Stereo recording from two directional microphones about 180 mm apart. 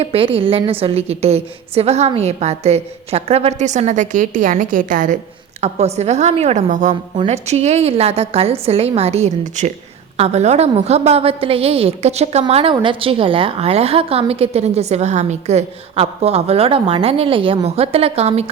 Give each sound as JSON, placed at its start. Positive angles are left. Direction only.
{"t": 0.0, "sound": "a woman's voice", "side_deg": -30}
{"t": 5.5, "sound": "a woman's voice", "side_deg": -35}
{"t": 6.9, "sound": "a woman's voice", "side_deg": -30}